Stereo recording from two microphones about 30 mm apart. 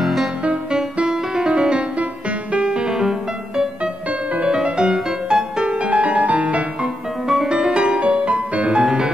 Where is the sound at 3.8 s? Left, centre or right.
Right.